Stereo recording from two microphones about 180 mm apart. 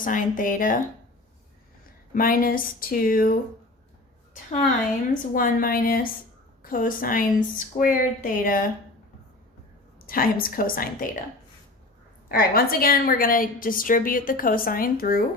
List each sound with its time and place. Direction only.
0.0 s a woman's voice: 50° left (ahead or behind)
2.1 s a woman's voice: 50° left (ahead or behind)
5.3 s a woman's voice: 50° left (ahead or behind)
10.1 s a woman's voice: 55° left (ahead or behind)
12.3 s a woman's voice: 55° left (ahead or behind)